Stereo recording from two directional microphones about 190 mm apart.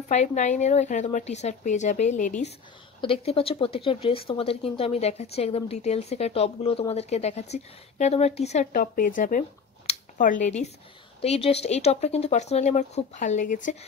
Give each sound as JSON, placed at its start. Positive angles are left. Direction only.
{"t": 0.1, "sound": "speech", "side_deg": 35}
{"t": 3.0, "sound": "speech", "side_deg": 30}
{"t": 9.8, "sound": "a sound", "side_deg": 45}
{"t": 11.1, "sound": "speech", "side_deg": 30}